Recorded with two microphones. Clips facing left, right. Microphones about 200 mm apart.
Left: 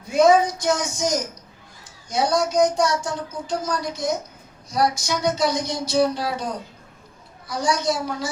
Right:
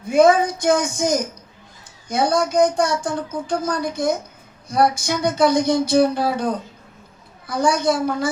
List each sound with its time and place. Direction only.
0.1 s speech: 55° right (ahead or behind)